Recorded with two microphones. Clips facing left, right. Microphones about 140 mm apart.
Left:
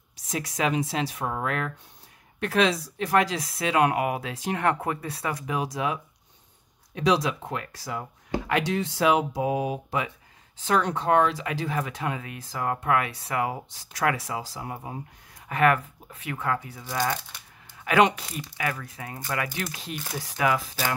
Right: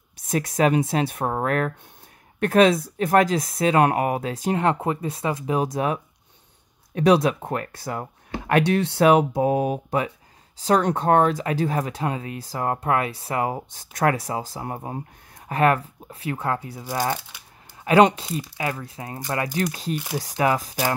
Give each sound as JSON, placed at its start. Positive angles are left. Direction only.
{"t": 0.1, "sound": "speech", "side_deg": -55}
{"t": 4.6, "sound": "speech", "side_deg": -25}
{"t": 5.5, "sound": "speech", "side_deg": -45}
{"t": 13.7, "sound": "speech", "side_deg": -50}
{"t": 15.5, "sound": "speech", "side_deg": -35}
{"t": 17.8, "sound": "speech", "side_deg": -35}